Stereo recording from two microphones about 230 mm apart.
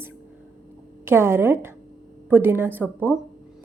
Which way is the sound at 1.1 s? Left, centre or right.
Centre.